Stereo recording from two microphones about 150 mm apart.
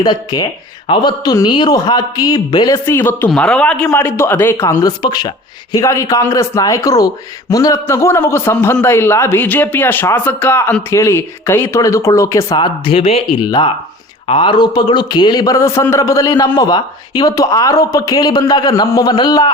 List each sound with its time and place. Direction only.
0.0 s a man's voice: 30° left (ahead or behind)
3.2 s a man's voice: 5° left (ahead or behind); by 12.5 s 20° left (ahead or behind)
12.5 s speech: 30° left (ahead or behind)
14.3 s a man's voice: 35° left (ahead or behind)